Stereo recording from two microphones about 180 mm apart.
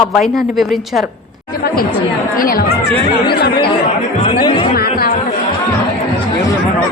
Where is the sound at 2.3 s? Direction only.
55° left (ahead or behind).